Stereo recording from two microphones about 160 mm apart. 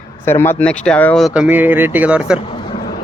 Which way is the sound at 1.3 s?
10° right (ahead or behind).